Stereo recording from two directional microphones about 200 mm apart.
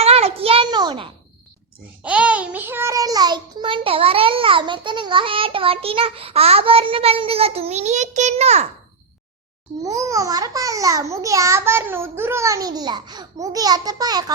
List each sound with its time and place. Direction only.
0.0 s a sound: 30° right (ahead or behind)
2.0 s a child's voice: 5° right (ahead or behind); by 8.6 s 35° right (ahead or behind)
9.8 s a child's voice: 15° right (ahead or behind)